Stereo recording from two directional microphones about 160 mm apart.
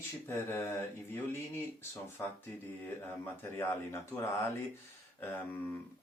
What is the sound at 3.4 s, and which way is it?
Speech, 15° left (ahead or behind).